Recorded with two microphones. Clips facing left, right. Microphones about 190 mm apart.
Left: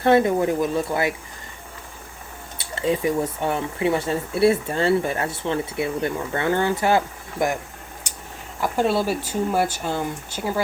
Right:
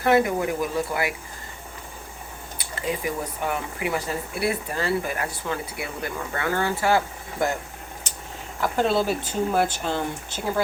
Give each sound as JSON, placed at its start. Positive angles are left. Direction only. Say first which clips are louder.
{"t": 0.0, "sound": "speech", "louder": "left 3 dB", "side_deg": 25}
{"t": 2.6, "sound": "speech", "louder": "left 6 dB", "side_deg": 25}
{"t": 8.1, "sound": "a sound", "louder": "even", "side_deg": 10}
{"t": 8.6, "sound": "speech", "louder": "left 1 dB", "side_deg": 10}